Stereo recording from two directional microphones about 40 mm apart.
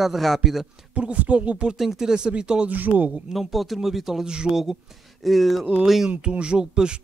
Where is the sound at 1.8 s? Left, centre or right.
Centre.